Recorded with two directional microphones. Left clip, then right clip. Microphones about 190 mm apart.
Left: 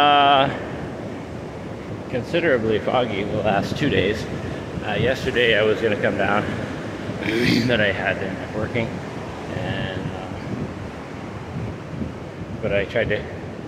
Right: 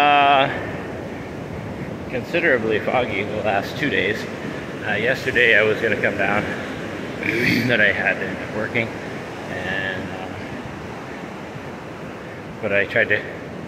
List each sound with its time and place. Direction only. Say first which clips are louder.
0.0 s a sound: even; 15° left (ahead or behind)
2.1 s speech: right 1 dB; 15° left (ahead or behind)
12.6 s speech: right 3 dB; 10° left (ahead or behind)